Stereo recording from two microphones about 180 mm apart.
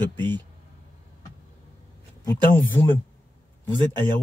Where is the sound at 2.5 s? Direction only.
10° left (ahead or behind).